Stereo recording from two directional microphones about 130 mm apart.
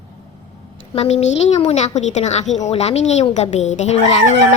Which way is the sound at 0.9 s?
55° left (ahead or behind).